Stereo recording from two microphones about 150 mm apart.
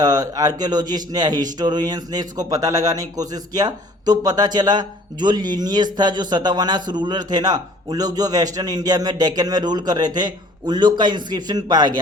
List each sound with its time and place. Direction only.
0.0 s a man's voice: 25° right (ahead or behind)